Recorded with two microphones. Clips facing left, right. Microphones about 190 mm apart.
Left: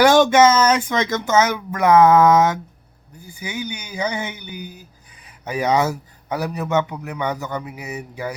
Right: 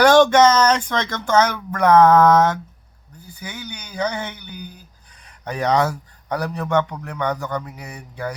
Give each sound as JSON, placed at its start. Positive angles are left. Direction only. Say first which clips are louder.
{"t": 0.0, "sound": "a man's voice", "louder": "even", "side_deg": 10}